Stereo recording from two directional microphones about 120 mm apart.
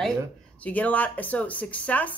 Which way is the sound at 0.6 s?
15° left (ahead or behind).